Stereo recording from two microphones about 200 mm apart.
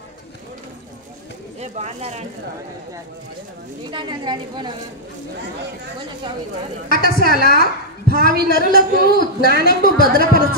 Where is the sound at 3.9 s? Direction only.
20° right (ahead or behind).